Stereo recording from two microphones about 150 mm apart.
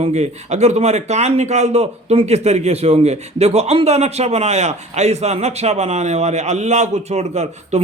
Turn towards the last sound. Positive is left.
turn(degrees=-45)  # may be behind; listen again after turning